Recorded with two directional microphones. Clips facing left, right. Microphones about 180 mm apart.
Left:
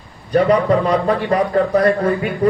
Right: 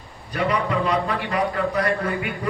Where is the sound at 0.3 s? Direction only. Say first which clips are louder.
Left 9 dB; 35° left (ahead or behind).